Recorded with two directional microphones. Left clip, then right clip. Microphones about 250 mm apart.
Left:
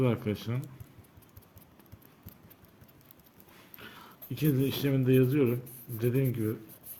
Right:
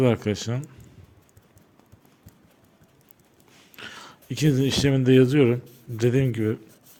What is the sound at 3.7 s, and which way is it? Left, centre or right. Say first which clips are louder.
Speech: right 10 dB; right.